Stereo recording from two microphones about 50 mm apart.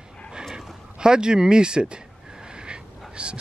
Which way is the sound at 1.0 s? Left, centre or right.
Centre.